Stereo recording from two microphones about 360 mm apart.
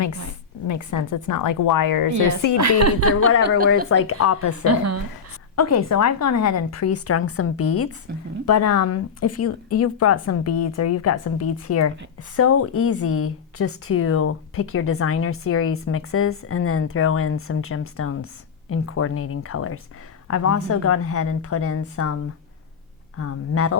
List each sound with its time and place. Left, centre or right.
0.7 s a woman's voice: left
2.6 s a woman's voice: right
3.8 s speech: left
4.6 s a woman's voice: right
5.5 s speech: left
23.1 s speech: left